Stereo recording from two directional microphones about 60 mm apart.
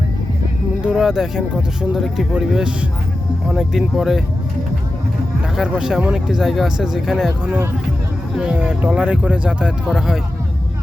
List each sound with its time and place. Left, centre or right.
0.8 s speech: centre
5.5 s speech: centre
8.4 s speech: centre